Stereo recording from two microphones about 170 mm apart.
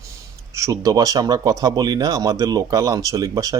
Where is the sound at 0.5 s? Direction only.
20° right (ahead or behind).